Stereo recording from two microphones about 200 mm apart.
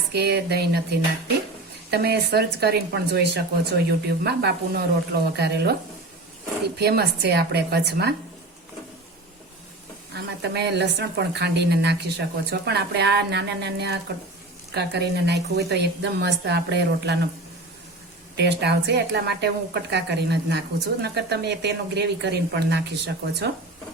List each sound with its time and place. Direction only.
0.1 s a woman's voice: 55° right (ahead or behind)
6.7 s speech: 55° right (ahead or behind)
10.2 s speech: 55° right (ahead or behind)
18.3 s speech: 55° right (ahead or behind)